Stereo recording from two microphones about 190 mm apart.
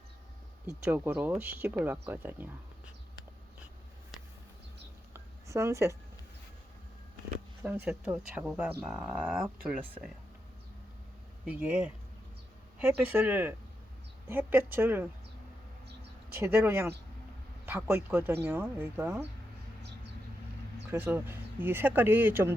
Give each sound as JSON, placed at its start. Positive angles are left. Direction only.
{"t": 0.7, "sound": "speech", "side_deg": -10}
{"t": 5.1, "sound": "a sound", "side_deg": -15}
{"t": 7.9, "sound": "speech", "side_deg": -10}
{"t": 11.4, "sound": "speech", "side_deg": -5}
{"t": 16.4, "sound": "speech", "side_deg": -15}
{"t": 20.9, "sound": "speech", "side_deg": -10}